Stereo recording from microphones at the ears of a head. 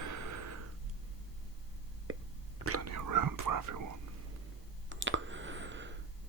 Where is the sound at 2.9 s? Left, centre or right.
Right.